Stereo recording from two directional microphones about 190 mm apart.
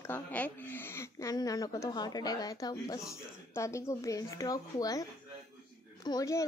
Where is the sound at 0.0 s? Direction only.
10° left (ahead or behind).